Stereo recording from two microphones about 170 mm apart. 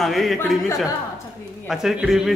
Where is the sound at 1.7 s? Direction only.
5° right (ahead or behind).